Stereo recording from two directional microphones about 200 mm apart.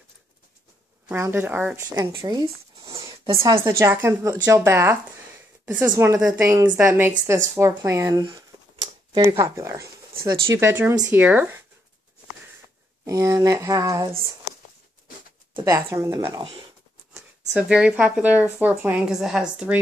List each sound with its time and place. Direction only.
1.0 s a woman's voice: 10° right (ahead or behind)
2.0 s speech: 20° right (ahead or behind)
2.8 s a sound: 15° right (ahead or behind)
3.6 s a woman's voice: 15° right (ahead or behind)
13.0 s a woman's voice: 15° right (ahead or behind)
15.5 s a woman's voice: 15° right (ahead or behind)
17.5 s a woman's voice: 5° right (ahead or behind)